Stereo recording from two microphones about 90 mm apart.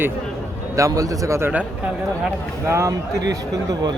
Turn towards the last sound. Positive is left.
turn(degrees=-40)  # may be behind; listen again after turning